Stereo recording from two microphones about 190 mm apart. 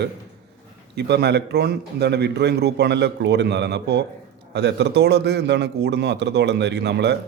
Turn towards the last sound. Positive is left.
turn(degrees=-65)  # may be behind; listen again after turning